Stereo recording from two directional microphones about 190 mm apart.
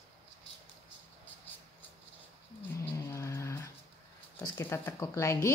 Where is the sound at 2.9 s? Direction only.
15° left (ahead or behind).